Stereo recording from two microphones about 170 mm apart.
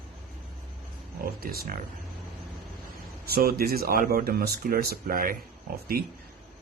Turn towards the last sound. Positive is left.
turn(degrees=-70)  # may be behind; listen again after turning